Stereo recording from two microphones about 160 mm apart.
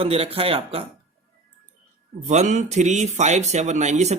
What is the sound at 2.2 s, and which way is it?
Speech, 45° right (ahead or behind).